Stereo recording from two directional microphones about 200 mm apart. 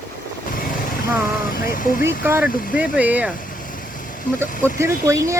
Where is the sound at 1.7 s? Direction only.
45° left (ahead or behind).